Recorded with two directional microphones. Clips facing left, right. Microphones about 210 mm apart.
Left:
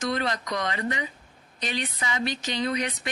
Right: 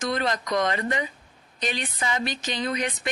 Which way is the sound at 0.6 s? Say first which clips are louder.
Right 3 dB; 45° right (ahead or behind).